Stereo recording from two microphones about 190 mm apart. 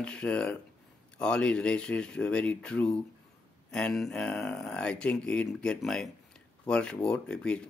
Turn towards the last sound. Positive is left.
turn(degrees=5)  # may be behind; listen again after turning